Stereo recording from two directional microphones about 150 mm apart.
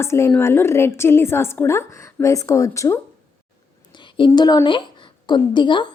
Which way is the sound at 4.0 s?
30° left (ahead or behind).